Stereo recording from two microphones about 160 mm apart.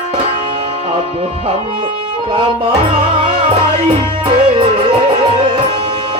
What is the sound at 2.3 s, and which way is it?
Music, 35° right (ahead or behind).